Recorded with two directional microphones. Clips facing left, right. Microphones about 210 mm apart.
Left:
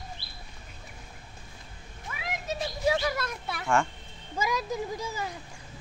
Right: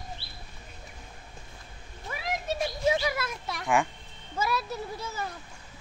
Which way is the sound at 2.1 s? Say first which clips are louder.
Right 4 dB; 35° right (ahead or behind).